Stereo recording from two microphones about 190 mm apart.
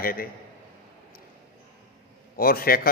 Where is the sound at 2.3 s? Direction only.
50° left (ahead or behind).